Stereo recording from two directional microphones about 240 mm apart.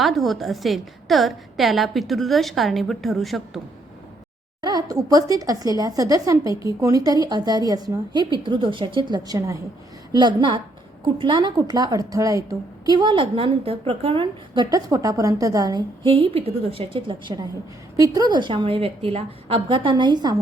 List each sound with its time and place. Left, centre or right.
0.0 s a woman's voice: centre
4.6 s a woman's voice: centre